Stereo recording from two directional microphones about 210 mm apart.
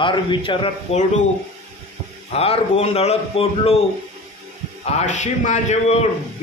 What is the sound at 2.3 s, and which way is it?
A man's voice, 30° left (ahead or behind).